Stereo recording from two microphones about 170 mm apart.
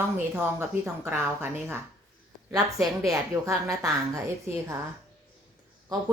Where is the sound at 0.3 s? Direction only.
10° right (ahead or behind).